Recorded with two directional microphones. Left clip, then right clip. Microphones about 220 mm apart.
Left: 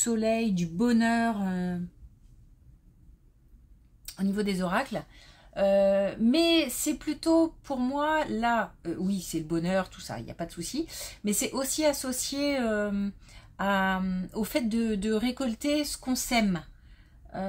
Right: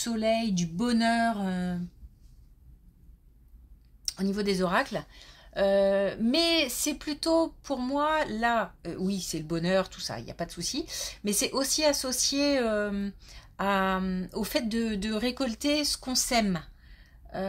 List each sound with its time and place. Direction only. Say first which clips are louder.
0.0 s speech: even; 25° right (ahead or behind)
4.1 s speech: right 2 dB; 25° right (ahead or behind)